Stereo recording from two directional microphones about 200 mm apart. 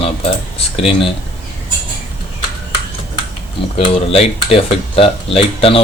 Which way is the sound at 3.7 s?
30° left (ahead or behind).